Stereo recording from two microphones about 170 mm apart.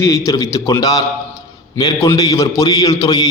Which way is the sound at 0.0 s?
20° left (ahead or behind).